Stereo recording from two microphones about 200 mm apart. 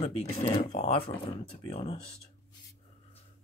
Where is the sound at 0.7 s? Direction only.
30° left (ahead or behind).